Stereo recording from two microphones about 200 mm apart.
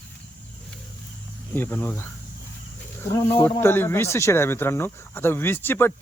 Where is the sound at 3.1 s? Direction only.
10° left (ahead or behind).